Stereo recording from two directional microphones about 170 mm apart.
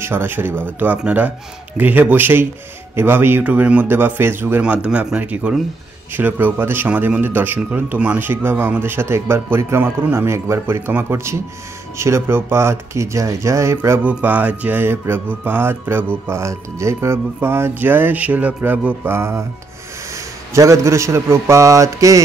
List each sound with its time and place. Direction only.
0.0 s speech: 15° right (ahead or behind)
20.5 s speech: 20° right (ahead or behind)